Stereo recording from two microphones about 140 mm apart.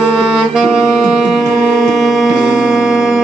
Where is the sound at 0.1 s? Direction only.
Centre (ahead or behind).